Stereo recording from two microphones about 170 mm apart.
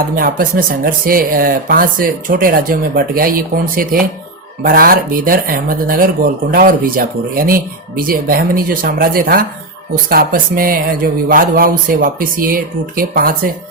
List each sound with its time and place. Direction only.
0.2 s speech: 60° right (ahead or behind)